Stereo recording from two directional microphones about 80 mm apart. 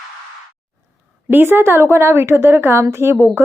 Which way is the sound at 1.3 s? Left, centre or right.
Right.